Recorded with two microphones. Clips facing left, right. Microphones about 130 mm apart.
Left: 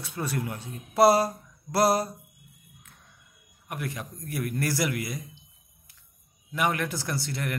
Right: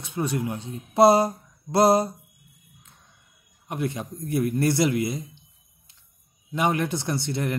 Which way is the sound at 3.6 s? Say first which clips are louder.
Right 6 dB; 25° right (ahead or behind).